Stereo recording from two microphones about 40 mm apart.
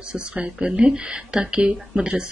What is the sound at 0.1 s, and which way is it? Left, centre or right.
Speech, right.